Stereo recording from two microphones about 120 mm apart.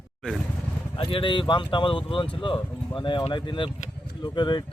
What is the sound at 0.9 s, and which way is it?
Speech, 45° left (ahead or behind).